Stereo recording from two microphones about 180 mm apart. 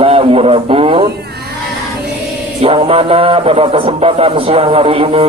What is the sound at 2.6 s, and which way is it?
Speech, 30° right (ahead or behind).